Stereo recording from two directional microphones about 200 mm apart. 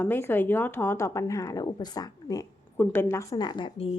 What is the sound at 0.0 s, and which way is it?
A woman's voice, 10° left (ahead or behind).